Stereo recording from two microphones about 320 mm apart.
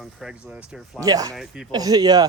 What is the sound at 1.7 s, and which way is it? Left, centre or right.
Speech, centre.